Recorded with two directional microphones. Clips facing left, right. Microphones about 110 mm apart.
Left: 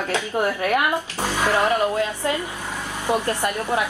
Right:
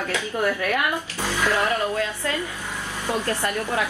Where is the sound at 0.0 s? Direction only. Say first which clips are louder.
Left 2 dB; 20° left (ahead or behind).